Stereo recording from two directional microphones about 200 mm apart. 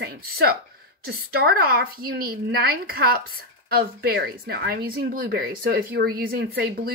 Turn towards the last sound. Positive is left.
turn(degrees=-50)  # may be behind; listen again after turning